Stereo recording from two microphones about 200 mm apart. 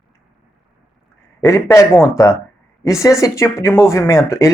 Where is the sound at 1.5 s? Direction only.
15° left (ahead or behind).